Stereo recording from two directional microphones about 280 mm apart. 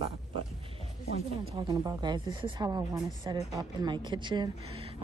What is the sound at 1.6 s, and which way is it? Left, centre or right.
A woman's voice, centre.